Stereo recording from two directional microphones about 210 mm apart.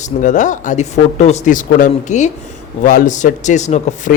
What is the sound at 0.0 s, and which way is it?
Speech, 35° left (ahead or behind).